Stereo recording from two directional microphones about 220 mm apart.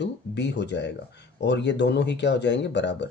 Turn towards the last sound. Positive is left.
turn(degrees=50)  # may be behind; listen again after turning